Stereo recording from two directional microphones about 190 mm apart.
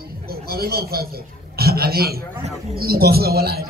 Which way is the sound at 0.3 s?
55° right (ahead or behind).